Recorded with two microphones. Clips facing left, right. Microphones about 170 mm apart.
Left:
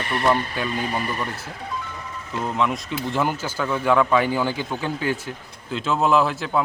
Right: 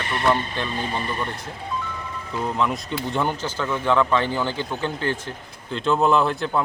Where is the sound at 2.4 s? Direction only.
5° left (ahead or behind).